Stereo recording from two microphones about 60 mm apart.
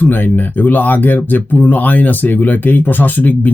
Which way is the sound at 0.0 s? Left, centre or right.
Left.